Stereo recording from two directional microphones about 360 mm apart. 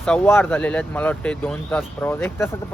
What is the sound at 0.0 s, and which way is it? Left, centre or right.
Speech, centre.